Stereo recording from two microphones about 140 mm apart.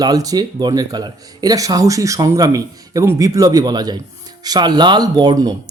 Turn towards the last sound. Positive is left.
turn(degrees=-30)  # may be behind; listen again after turning